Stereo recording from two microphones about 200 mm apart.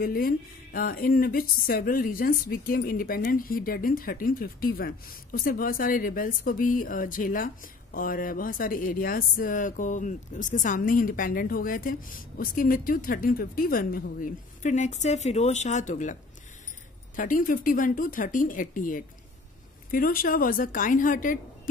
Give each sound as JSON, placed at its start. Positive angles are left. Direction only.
{"t": 0.0, "sound": "a woman's voice", "side_deg": 45}